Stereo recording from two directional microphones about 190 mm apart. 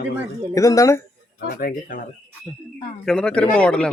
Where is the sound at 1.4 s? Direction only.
50° left (ahead or behind).